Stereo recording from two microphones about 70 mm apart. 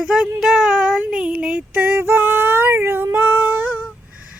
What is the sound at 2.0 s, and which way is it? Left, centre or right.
Female singing, right.